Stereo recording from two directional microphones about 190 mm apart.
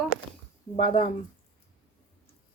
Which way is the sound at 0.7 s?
25° left (ahead or behind).